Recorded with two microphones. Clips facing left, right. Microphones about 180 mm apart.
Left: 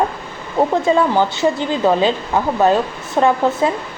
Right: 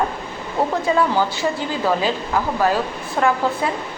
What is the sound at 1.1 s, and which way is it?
Speech, 20° left (ahead or behind).